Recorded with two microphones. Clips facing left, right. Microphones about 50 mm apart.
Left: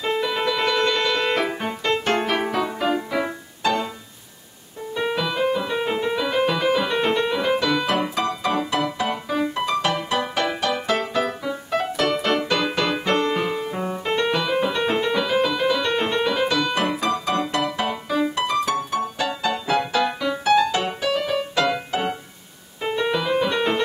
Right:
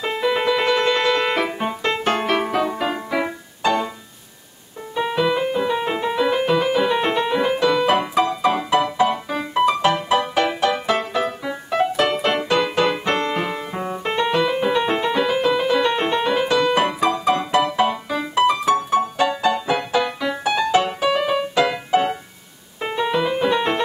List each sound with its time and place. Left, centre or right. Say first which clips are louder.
0.0 s keyboard: right 2 dB; centre
1.4 s music: right 2 dB; centre
4.9 s music: right 4 dB; centre
21.1 s music: right 3 dB; right
21.5 s music: right 5 dB; centre
22.8 s piano: right 1 dB; centre
23.0 s music: right 3 dB; centre